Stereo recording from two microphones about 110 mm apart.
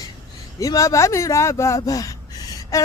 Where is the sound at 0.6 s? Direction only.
30° left (ahead or behind).